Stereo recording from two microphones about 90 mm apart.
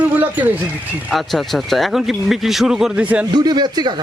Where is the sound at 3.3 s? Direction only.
50° right (ahead or behind).